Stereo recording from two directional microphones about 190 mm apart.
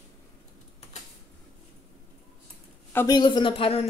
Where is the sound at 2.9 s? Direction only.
10° left (ahead or behind).